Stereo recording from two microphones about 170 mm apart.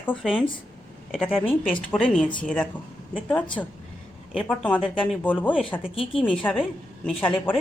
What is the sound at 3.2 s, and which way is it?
A woman's voice, 10° left (ahead or behind).